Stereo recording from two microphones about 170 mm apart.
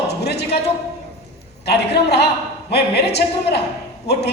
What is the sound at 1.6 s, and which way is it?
A woman's voice, 75° left (ahead or behind).